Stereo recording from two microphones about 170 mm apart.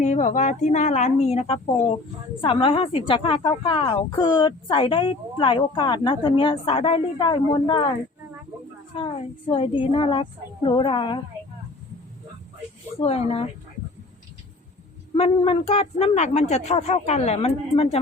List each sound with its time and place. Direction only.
0.0 s a woman's voice: 45° left (ahead or behind); by 7.9 s 25° left (ahead or behind)
9.0 s speech: 30° left (ahead or behind)
13.0 s speech: 35° left (ahead or behind)
15.1 s speech: 30° left (ahead or behind)